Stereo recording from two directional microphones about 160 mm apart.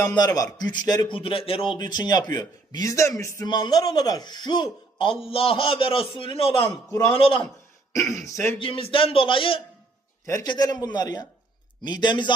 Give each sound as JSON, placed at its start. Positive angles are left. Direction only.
{"t": 0.1, "sound": "a man's voice", "side_deg": 25}
{"t": 8.5, "sound": "a man's voice", "side_deg": 35}
{"t": 10.2, "sound": "a man's voice", "side_deg": 20}